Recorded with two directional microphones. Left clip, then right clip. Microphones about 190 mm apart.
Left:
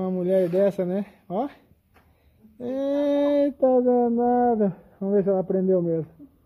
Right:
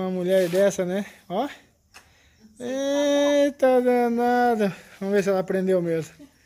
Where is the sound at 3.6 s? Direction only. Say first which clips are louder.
Left 2 dB; 35° right (ahead or behind).